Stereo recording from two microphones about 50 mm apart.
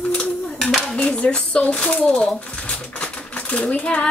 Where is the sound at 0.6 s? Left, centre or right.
Centre.